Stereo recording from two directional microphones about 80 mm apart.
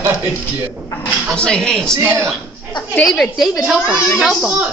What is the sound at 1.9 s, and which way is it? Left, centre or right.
Speech, right.